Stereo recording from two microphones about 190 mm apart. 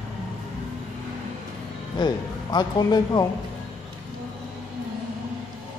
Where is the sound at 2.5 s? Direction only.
20° left (ahead or behind).